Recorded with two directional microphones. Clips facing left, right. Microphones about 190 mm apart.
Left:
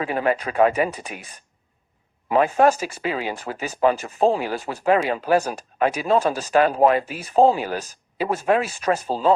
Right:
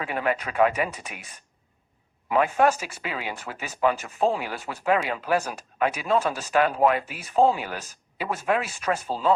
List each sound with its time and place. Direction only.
0.0 s speech: 35° left (ahead or behind)